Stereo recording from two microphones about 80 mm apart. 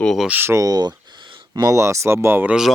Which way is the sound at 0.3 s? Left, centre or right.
Right.